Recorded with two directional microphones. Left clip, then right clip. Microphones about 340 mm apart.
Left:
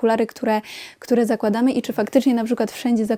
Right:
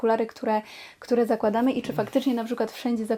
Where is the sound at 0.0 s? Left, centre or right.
Left.